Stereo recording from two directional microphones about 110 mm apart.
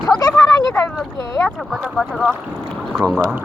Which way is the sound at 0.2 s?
25° left (ahead or behind).